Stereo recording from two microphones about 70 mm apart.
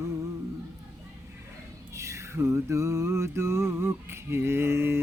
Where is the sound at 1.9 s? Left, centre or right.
Right.